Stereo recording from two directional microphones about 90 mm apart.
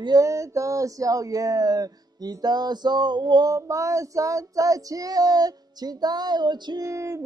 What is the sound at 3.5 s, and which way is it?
Female singing, 35° right (ahead or behind).